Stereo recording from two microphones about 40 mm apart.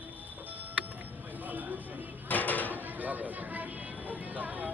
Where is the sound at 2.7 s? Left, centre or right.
Right.